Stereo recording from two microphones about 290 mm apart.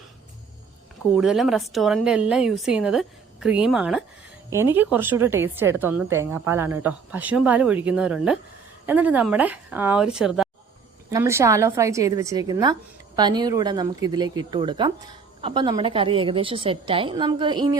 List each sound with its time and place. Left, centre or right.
1.1 s a woman's voice: centre